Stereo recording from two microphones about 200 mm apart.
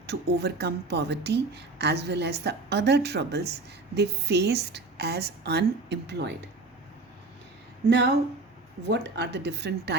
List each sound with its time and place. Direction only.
0.1 s a woman's voice: 55° right (ahead or behind)
7.9 s a woman's voice: 60° right (ahead or behind)